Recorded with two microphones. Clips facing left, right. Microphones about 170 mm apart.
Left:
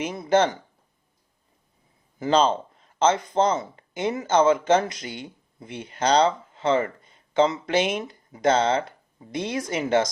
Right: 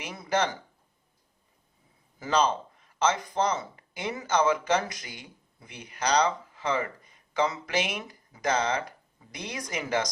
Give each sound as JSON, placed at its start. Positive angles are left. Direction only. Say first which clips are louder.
{"t": 0.0, "sound": "speech", "louder": "left 7 dB", "side_deg": 25}
{"t": 2.1, "sound": "speech", "louder": "left 5 dB", "side_deg": 25}